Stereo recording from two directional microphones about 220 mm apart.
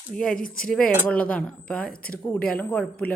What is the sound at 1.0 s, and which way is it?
Speech, 5° left (ahead or behind).